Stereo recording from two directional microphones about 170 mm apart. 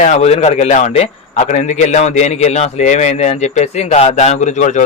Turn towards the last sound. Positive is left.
turn(degrees=45)  # may be behind; listen again after turning